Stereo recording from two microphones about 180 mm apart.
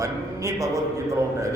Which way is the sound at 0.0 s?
15° right (ahead or behind).